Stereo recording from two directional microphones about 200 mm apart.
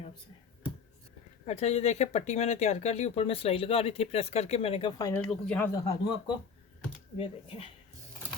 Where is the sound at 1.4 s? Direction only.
30° left (ahead or behind).